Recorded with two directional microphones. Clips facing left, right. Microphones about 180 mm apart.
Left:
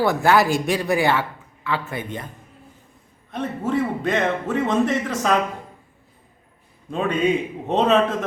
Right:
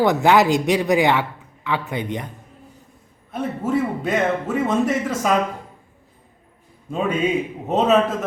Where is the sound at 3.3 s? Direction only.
5° right (ahead or behind).